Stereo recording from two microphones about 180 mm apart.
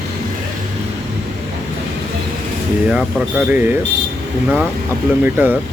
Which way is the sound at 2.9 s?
5° right (ahead or behind).